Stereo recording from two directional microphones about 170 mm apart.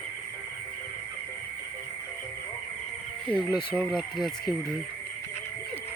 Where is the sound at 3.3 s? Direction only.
10° left (ahead or behind).